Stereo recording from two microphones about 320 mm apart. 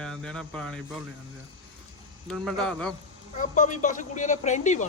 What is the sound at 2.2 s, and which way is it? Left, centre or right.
Mantra, centre.